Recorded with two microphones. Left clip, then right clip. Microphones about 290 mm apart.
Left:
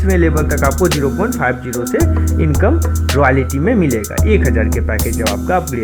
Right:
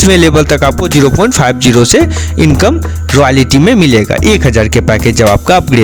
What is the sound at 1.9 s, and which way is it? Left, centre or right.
A man's voice, right.